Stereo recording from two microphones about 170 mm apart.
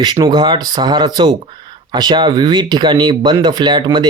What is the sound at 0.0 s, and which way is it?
Speech, 25° right (ahead or behind).